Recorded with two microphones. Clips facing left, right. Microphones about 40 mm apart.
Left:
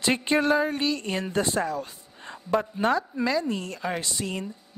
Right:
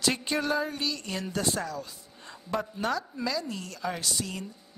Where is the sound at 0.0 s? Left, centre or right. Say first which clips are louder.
Left 5 dB; left.